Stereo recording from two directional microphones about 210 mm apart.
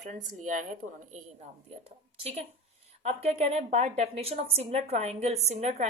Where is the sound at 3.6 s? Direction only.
35° right (ahead or behind).